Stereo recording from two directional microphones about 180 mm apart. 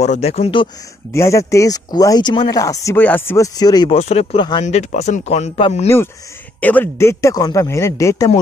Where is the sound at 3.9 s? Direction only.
35° left (ahead or behind).